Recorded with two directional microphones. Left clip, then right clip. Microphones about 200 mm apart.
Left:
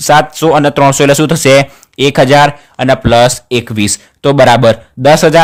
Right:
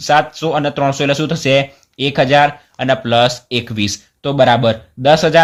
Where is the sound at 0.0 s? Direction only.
40° left (ahead or behind).